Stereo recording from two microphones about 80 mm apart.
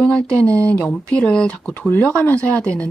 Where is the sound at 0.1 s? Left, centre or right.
Centre.